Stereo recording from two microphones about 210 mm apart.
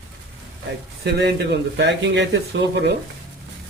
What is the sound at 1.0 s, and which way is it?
Speech, 55° right (ahead or behind).